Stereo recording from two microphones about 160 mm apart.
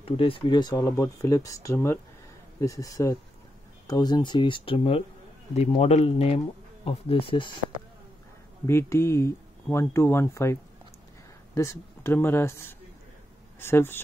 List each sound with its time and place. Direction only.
0.0 s speech: 35° left (ahead or behind)
8.6 s speech: 15° left (ahead or behind)